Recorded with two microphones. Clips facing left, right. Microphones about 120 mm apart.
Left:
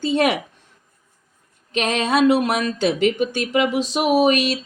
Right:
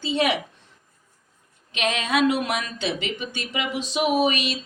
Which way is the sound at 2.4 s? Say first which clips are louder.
Left 7 dB; 40° left (ahead or behind).